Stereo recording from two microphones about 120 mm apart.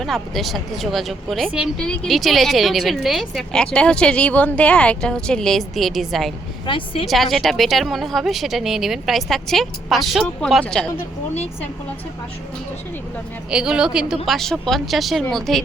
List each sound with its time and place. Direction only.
0.0 s a woman's voice: centre (ahead or behind)
1.8 s a woman's voice: 5° left (ahead or behind)
6.7 s a woman's voice: 45° left (ahead or behind)
7.1 s a woman's voice: centre (ahead or behind)
13.5 s a woman's voice: 5° right (ahead or behind)